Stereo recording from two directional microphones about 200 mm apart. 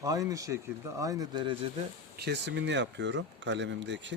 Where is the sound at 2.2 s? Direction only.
60° right (ahead or behind).